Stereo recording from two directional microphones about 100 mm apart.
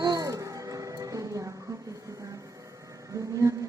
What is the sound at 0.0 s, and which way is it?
Music, 40° right (ahead or behind).